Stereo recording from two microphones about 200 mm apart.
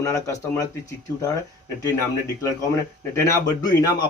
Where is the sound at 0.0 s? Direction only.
15° left (ahead or behind).